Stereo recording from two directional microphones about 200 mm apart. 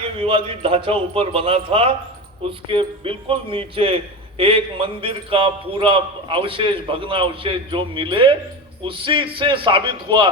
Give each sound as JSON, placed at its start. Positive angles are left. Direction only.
{"t": 0.0, "sound": "a man's voice", "side_deg": -25}